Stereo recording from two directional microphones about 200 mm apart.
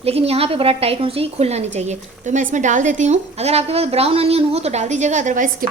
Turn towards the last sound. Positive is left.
turn(degrees=-40)  # may be behind; listen again after turning